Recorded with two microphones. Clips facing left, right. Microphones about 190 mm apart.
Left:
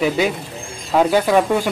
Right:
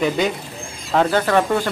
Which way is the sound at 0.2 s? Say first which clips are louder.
Left 2 dB; 5° left (ahead or behind).